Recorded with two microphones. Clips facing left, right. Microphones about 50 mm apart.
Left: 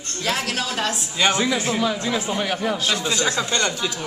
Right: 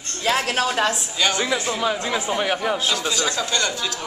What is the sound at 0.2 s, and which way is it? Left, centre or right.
Speech, right.